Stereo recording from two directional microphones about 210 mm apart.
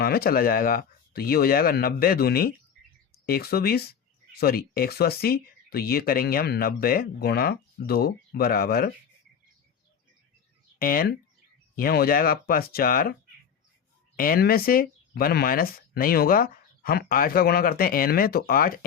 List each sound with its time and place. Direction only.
0.0 s speech: 45° left (ahead or behind)
10.8 s speech: 45° left (ahead or behind)
14.2 s speech: 45° left (ahead or behind)